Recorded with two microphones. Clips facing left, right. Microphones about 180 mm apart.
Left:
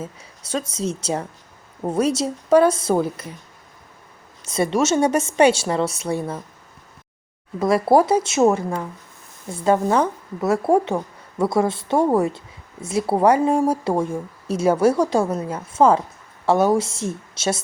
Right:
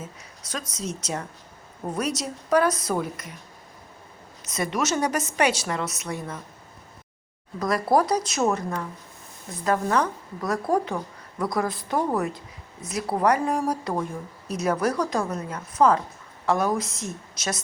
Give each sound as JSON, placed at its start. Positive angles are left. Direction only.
{"t": 0.0, "sound": "speech", "side_deg": 30}
{"t": 4.4, "sound": "speech", "side_deg": 30}
{"t": 7.6, "sound": "speech", "side_deg": 25}